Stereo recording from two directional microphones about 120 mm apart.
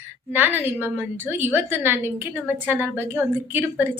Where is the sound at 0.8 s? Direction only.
15° right (ahead or behind).